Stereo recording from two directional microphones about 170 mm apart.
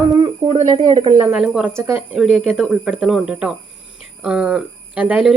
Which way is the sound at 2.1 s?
Centre (ahead or behind).